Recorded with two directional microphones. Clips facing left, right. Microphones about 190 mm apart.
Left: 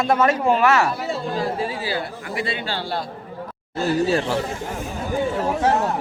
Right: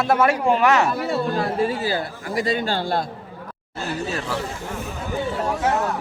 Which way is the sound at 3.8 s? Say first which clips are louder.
Left 7 dB; 30° left (ahead or behind).